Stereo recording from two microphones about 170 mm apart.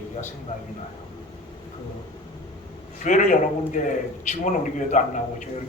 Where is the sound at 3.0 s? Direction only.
50° left (ahead or behind).